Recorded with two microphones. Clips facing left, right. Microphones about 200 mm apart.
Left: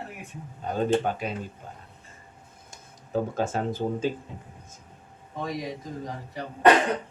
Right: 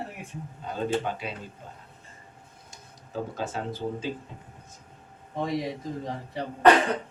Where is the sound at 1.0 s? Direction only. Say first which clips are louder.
Left 4 dB; 50° left (ahead or behind).